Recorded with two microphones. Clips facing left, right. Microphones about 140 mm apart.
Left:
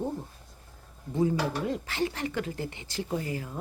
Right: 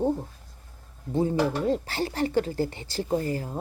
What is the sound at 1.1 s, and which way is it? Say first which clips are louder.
Speech: right 3 dB; 30° right (ahead or behind).